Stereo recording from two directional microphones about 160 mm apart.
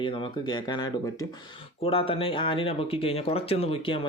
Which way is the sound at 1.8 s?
35° left (ahead or behind).